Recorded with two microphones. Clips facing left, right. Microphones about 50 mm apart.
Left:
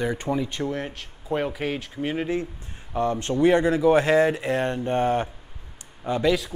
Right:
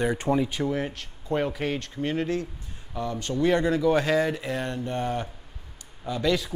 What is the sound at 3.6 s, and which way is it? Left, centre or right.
Speech, centre.